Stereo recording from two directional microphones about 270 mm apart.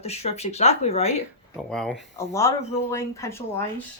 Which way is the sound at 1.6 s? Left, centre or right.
Centre.